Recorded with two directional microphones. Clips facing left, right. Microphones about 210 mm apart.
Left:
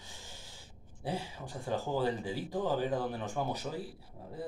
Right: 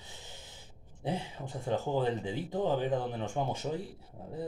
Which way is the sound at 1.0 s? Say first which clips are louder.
Right 2 dB; 20° right (ahead or behind).